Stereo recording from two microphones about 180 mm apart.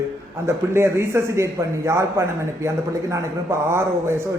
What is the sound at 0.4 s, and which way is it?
A man's voice, 15° right (ahead or behind).